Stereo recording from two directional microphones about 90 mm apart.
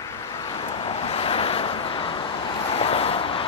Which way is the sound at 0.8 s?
90° left.